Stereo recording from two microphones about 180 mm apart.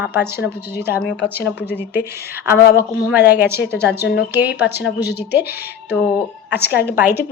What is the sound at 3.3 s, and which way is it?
Speech, 10° right (ahead or behind).